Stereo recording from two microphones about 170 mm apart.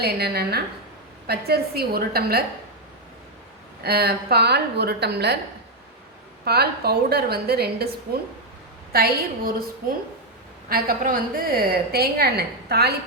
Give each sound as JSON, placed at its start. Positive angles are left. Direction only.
{"t": 0.0, "sound": "a woman's voice", "side_deg": -70}
{"t": 3.8, "sound": "a woman's voice", "side_deg": -65}
{"t": 6.4, "sound": "a woman's voice", "side_deg": -70}
{"t": 10.7, "sound": "a woman's voice", "side_deg": -60}